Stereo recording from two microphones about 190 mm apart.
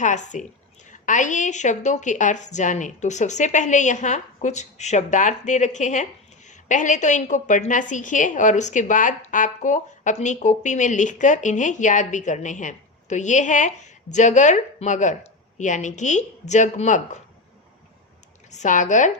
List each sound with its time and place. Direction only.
0.0 s a woman's voice: 40° left (ahead or behind)
18.5 s a woman's voice: 40° left (ahead or behind)